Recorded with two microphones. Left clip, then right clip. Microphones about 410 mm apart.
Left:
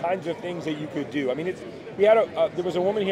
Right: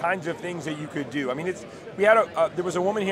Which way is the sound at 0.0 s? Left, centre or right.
Right.